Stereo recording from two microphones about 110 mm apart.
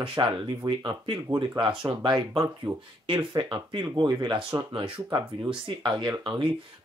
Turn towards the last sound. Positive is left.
turn(degrees=-40)  # may be behind; listen again after turning